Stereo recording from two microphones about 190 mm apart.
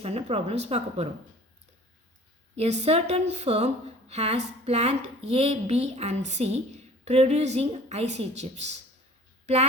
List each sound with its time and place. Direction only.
0.0 s a woman's voice: 30° right (ahead or behind)
2.6 s a woman's voice: 35° right (ahead or behind)